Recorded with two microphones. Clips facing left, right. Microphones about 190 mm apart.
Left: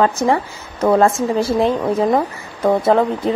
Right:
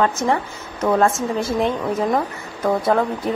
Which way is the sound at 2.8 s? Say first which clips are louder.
Left 4 dB; 25° left (ahead or behind).